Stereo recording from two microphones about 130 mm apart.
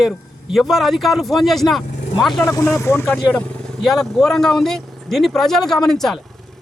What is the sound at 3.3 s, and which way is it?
Speech, 10° left (ahead or behind).